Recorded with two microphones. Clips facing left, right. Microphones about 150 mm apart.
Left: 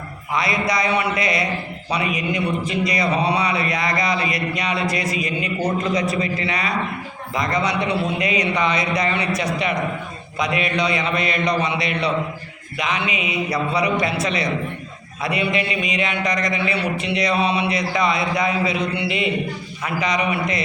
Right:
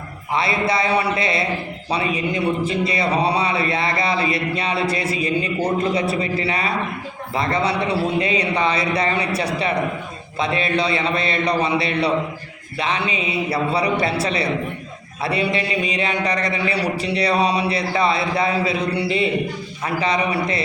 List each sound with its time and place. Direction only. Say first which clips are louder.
0.3 s a man's voice: right 1 dB; 30° right (ahead or behind)